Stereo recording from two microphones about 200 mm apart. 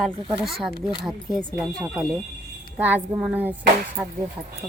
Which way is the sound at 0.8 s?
25° left (ahead or behind).